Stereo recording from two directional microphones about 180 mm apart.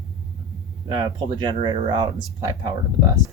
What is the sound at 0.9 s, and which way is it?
Speech, 25° right (ahead or behind).